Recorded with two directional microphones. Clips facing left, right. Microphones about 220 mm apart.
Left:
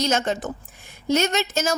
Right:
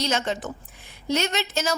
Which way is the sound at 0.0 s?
45° left (ahead or behind).